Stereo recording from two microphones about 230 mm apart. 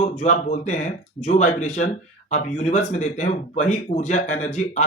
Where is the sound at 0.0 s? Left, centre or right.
Left.